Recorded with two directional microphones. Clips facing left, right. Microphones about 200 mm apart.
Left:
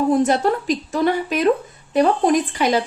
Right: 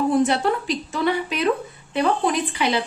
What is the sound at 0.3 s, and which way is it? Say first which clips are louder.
A woman's voice: left 3 dB; 45° left (ahead or behind).